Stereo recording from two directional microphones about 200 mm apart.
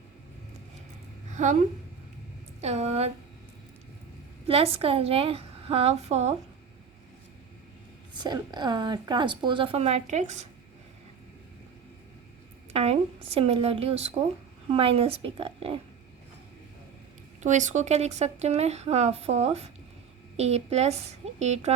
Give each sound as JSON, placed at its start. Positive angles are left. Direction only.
{"t": 2.6, "sound": "speech", "side_deg": -30}
{"t": 4.4, "sound": "a woman's voice", "side_deg": -30}
{"t": 8.1, "sound": "a woman's voice", "side_deg": -20}
{"t": 12.7, "sound": "a woman's voice", "side_deg": -30}
{"t": 17.4, "sound": "a woman's voice", "side_deg": -35}